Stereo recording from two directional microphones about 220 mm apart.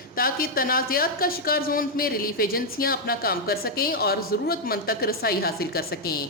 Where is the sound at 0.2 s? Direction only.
40° left (ahead or behind).